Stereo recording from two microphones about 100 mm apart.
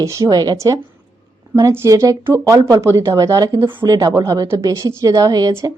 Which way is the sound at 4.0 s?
35° right (ahead or behind).